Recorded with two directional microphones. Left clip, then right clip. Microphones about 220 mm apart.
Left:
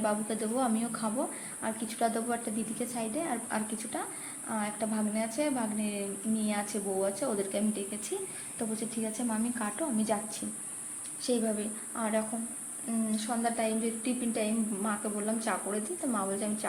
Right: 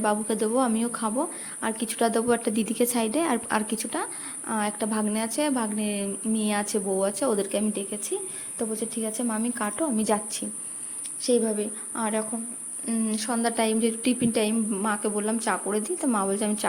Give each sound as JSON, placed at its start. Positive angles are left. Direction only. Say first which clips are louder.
{"t": 0.0, "sound": "a woman's voice", "louder": "right 7 dB", "side_deg": -35}
{"t": 9.3, "sound": "a woman's voice", "louder": "right 5 dB", "side_deg": -35}